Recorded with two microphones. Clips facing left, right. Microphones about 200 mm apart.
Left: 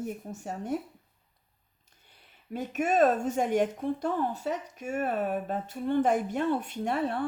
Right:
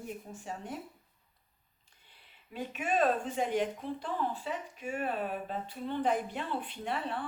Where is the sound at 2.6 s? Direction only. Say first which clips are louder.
Left 6 dB; 45° left (ahead or behind).